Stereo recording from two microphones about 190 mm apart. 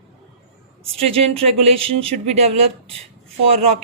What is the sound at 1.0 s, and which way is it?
A woman's voice, 30° right (ahead or behind).